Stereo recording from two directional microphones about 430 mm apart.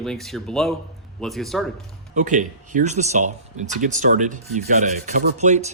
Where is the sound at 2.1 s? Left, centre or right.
Centre.